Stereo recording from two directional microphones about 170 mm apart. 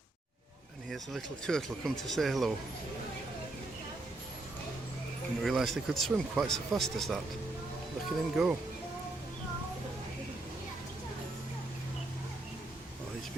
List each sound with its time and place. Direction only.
0.9 s speech: centre (ahead or behind)
5.4 s speech: centre (ahead or behind)
8.4 s speech: centre (ahead or behind)